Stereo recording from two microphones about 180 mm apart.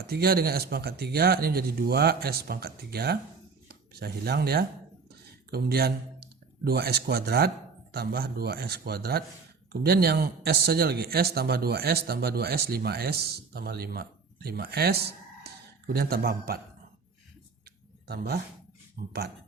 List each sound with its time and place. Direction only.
0.1 s speech: 60° right (ahead or behind)
5.2 s a sound: 60° right (ahead or behind)
6.7 s speech: 60° right (ahead or behind)
18.1 s speech: 60° right (ahead or behind)